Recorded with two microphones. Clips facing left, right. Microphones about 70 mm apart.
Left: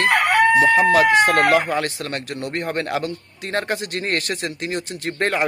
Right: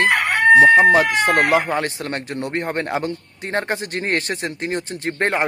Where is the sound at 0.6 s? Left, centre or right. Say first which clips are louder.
Right 3 dB; right.